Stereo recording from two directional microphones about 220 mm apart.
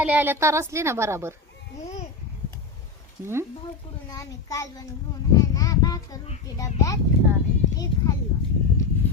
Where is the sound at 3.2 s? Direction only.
10° right (ahead or behind).